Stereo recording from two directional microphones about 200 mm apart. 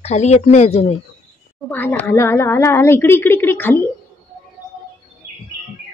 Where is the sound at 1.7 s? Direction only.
10° left (ahead or behind).